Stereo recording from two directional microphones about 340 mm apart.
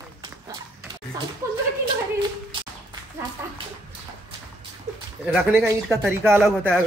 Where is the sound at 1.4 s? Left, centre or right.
Centre.